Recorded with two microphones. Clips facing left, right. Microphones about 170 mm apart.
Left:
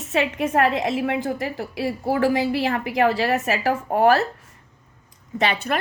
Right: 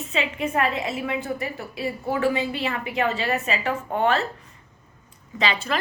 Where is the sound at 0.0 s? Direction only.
75° left (ahead or behind).